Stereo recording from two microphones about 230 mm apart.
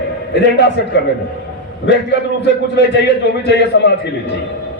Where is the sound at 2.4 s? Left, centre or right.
Left.